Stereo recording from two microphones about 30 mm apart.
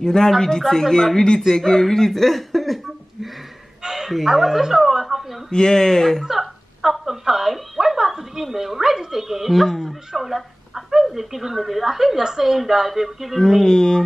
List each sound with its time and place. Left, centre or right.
0.0 s music: left
0.4 s speech: centre
3.8 s a woman's voice: centre
5.0 s a sound: centre
5.5 s speech: left
6.2 s a sound: centre
9.1 s a woman's voice: centre
13.4 s speech: centre
13.7 s music: left